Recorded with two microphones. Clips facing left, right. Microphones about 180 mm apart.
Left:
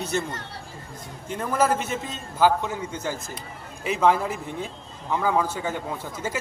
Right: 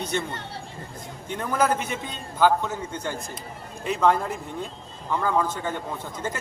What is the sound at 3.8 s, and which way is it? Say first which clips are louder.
A man's voice: left 1 dB; 5° left (ahead or behind).